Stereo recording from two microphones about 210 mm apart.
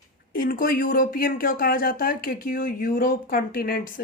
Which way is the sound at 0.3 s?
40° left (ahead or behind).